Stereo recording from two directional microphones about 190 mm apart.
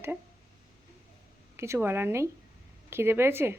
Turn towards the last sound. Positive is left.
turn(degrees=-10)  # may be behind; listen again after turning